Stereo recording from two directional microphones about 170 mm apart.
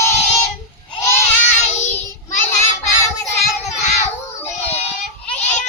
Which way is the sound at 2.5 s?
15° left (ahead or behind).